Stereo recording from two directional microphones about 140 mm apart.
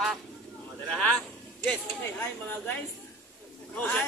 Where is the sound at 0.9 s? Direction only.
5° left (ahead or behind).